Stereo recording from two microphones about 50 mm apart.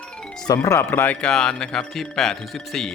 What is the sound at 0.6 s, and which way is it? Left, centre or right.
Speech, left.